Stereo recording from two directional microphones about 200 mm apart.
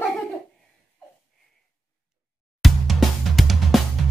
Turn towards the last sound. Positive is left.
turn(degrees=0)  # may be behind; listen again after turning